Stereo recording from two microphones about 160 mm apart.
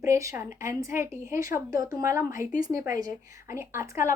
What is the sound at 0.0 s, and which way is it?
A woman's voice, 20° right (ahead or behind).